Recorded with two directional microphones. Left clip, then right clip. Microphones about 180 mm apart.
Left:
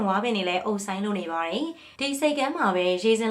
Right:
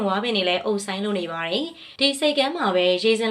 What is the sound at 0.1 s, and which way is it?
Speech, 20° right (ahead or behind).